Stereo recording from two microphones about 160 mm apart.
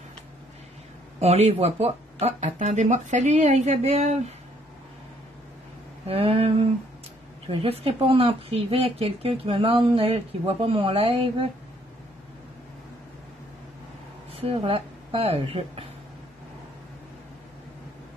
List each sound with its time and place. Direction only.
1.2 s speech: 40° right (ahead or behind)
6.0 s speech: 40° right (ahead or behind)
14.3 s speech: 35° right (ahead or behind)